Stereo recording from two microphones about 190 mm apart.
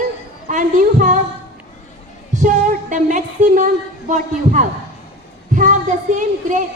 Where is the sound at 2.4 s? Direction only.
45° right (ahead or behind).